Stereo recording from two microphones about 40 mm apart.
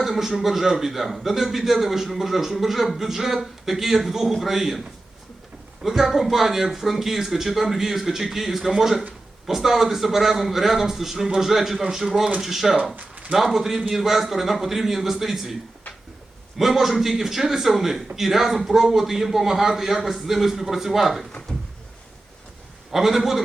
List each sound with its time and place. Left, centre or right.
0.0 s a man's voice: centre
5.8 s a man's voice: centre
13.0 s a sound: right
13.3 s a man's voice: centre
16.6 s a man's voice: centre
22.9 s a man's voice: centre